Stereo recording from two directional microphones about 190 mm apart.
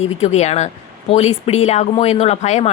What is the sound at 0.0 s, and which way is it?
Speech, 35° left (ahead or behind).